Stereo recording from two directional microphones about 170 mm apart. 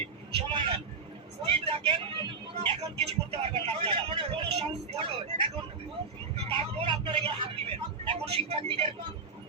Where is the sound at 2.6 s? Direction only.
35° right (ahead or behind).